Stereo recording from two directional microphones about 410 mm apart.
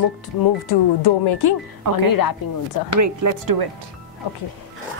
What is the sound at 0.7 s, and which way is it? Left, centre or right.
Speech, left.